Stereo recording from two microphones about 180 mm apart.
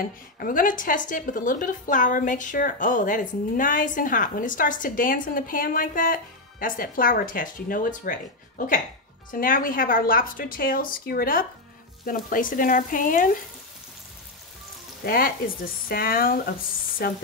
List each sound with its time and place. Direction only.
0.0 s a woman's voice: 50° left (ahead or behind)
15.0 s a woman's voice: 55° left (ahead or behind)